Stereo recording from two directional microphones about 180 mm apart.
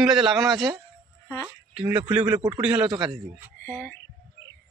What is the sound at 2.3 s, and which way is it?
Speech, 25° right (ahead or behind).